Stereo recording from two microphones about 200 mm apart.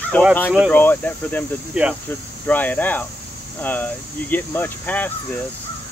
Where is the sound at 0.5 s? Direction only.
5° right (ahead or behind).